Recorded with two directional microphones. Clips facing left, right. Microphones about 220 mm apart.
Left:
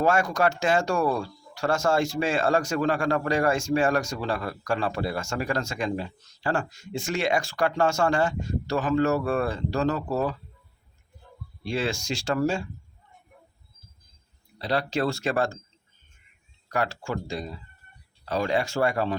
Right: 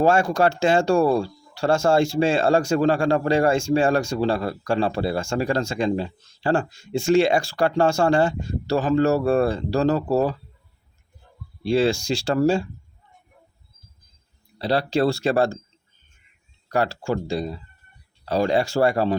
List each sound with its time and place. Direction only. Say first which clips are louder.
0.0 s speech: right 4 dB; 30° right (ahead or behind)
11.6 s speech: right 9 dB; 30° right (ahead or behind)
14.6 s speech: right 5 dB; 30° right (ahead or behind)
16.6 s speech: right 6 dB; 30° right (ahead or behind)